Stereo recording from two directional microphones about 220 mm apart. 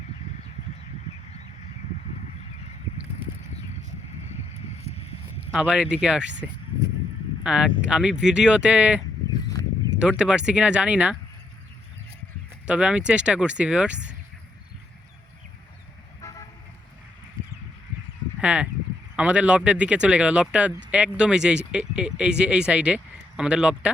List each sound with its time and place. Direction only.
5.5 s speech: 5° right (ahead or behind)
10.0 s speech: 5° right (ahead or behind)
12.6 s speech: 5° right (ahead or behind)
16.2 s toot: 15° left (ahead or behind)
18.3 s speech: 5° right (ahead or behind)